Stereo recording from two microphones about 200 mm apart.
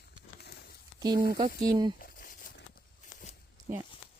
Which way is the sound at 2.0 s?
45° left (ahead or behind).